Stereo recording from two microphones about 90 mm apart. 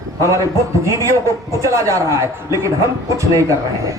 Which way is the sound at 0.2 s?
35° right (ahead or behind).